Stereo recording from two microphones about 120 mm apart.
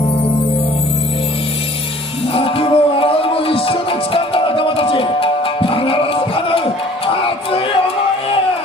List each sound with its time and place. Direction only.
2.3 s music: 50° left (ahead or behind)